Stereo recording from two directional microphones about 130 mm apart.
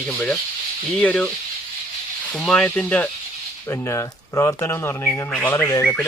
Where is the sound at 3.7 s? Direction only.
20° left (ahead or behind).